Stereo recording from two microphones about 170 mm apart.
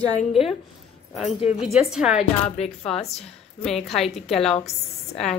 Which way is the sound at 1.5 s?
5° right (ahead or behind).